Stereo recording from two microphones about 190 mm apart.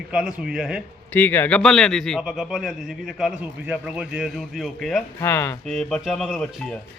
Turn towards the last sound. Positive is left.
turn(degrees=0)  # may be behind; listen again after turning